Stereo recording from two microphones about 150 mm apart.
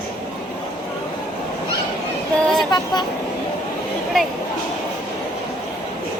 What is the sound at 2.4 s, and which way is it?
Vehicle, centre (ahead or behind).